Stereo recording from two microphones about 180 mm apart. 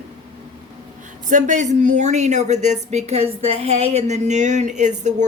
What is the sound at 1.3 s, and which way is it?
Speech, 45° right (ahead or behind).